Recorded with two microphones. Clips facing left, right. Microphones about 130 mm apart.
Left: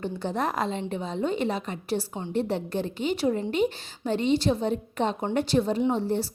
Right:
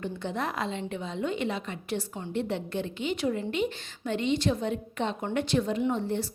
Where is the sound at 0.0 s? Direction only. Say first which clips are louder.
Left 4 dB; 35° left (ahead or behind).